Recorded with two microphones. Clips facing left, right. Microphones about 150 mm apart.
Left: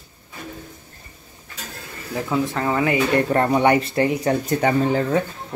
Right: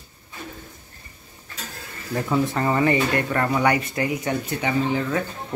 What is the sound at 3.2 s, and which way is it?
Speech, 30° left (ahead or behind).